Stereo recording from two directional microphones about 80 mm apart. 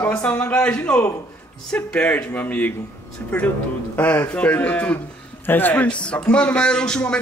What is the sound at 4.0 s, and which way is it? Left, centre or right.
A man's voice, left.